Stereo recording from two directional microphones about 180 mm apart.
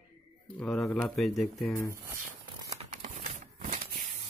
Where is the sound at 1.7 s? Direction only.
15° left (ahead or behind).